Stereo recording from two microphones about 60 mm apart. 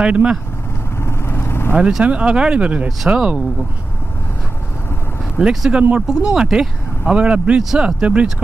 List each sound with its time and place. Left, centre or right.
0.0 s speech: centre
1.0 s vehicle: left
1.8 s speech: centre
5.4 s speech: centre
5.7 s speech: right